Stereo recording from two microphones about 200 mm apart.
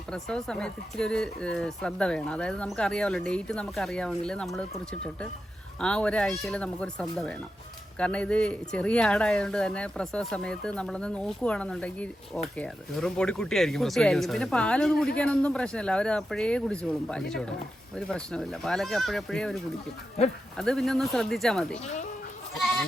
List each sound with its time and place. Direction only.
0.1 s speech: 5° left (ahead or behind)
20.6 s speech: 5° left (ahead or behind)
21.8 s speech: 35° left (ahead or behind)